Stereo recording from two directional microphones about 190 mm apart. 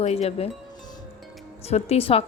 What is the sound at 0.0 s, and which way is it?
Speech, 35° left (ahead or behind).